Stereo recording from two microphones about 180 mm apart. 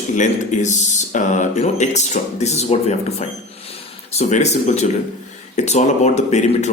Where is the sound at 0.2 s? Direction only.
40° left (ahead or behind).